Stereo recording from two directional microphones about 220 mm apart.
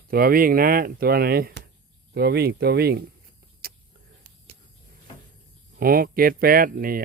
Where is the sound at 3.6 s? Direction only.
45° right (ahead or behind).